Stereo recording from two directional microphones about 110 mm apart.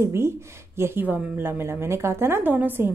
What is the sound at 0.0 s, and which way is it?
A woman's voice, 25° right (ahead or behind).